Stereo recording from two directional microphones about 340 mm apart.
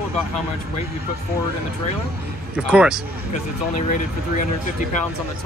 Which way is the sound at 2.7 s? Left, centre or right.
Centre.